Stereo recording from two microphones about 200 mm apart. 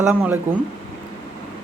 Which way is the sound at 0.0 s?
10° right (ahead or behind).